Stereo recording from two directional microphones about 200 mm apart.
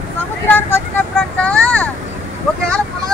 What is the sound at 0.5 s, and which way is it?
Vehicle, 10° left (ahead or behind).